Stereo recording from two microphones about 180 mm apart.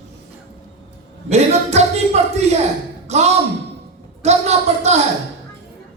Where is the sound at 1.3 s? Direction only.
35° right (ahead or behind).